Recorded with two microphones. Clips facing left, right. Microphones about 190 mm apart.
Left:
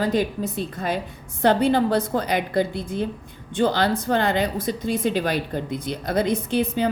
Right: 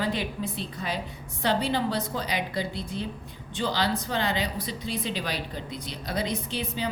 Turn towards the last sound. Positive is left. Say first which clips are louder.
# left 9 dB
turn(degrees=50)  # may be behind; listen again after turning